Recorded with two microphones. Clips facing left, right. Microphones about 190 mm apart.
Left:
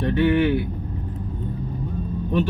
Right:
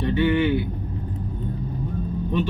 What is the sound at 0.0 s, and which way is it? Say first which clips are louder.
Vehicle: left 2 dB; 65° left (ahead or behind).